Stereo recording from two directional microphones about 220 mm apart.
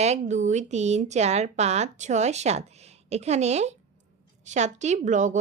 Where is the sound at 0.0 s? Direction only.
30° right (ahead or behind).